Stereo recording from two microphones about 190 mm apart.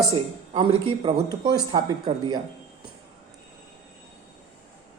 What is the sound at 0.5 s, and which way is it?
A woman's voice, 25° right (ahead or behind).